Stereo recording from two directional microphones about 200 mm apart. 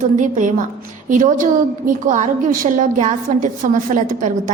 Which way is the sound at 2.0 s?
35° right (ahead or behind).